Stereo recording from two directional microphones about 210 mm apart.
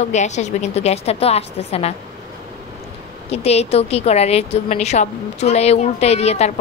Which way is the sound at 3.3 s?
30° left (ahead or behind).